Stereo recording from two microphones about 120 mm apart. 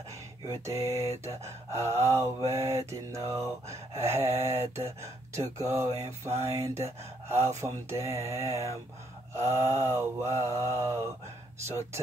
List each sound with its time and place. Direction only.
0.7 s mantra: 25° right (ahead or behind)